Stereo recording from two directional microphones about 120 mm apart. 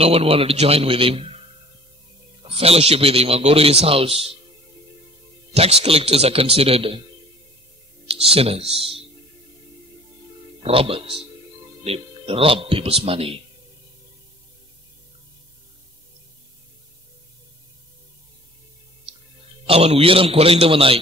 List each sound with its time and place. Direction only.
0.0 s speech: 50° right (ahead or behind)
2.4 s a man's voice: 55° right (ahead or behind)
5.5 s a man's voice: 60° right (ahead or behind)
8.1 s speech: 55° right (ahead or behind)
10.6 s speech: 50° right (ahead or behind)
19.6 s speech: 55° right (ahead or behind)